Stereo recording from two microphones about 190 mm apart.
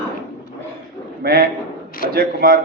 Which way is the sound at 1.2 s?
55° right (ahead or behind).